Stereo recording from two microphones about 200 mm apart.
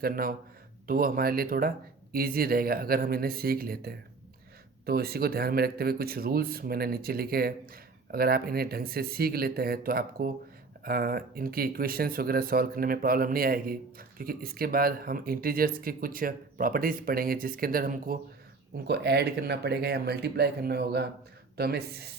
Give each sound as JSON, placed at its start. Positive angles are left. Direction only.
{"t": 0.0, "sound": "speech", "side_deg": -45}